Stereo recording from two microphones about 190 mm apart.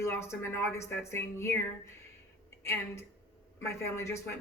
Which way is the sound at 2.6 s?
15° left (ahead or behind).